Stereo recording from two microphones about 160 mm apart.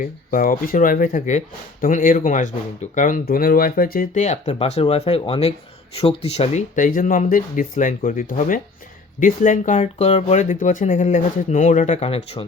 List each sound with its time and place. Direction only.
0.0 s speech: 60° left (ahead or behind); by 12.5 s 35° left (ahead or behind)